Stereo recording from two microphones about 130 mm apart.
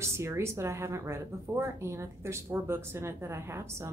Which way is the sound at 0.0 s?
20° right (ahead or behind).